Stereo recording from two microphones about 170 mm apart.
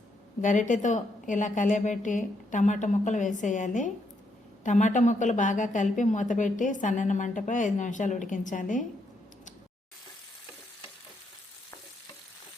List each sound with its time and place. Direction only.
0.4 s a woman's voice: 45° left (ahead or behind)